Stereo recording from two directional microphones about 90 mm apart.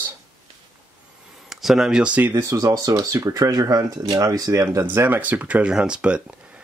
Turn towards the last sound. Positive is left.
turn(degrees=-10)  # may be behind; listen again after turning